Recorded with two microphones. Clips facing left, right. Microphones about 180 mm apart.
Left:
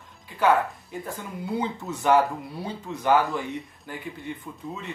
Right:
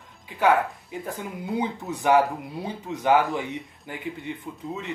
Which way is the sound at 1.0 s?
15° right (ahead or behind).